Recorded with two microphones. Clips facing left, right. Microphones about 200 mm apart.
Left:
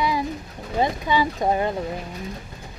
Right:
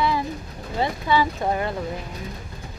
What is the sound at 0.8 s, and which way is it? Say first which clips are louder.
Speech: even; 15° left (ahead or behind).